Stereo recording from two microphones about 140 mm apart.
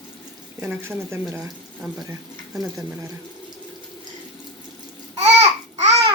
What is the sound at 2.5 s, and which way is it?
Speech, 25° right (ahead or behind).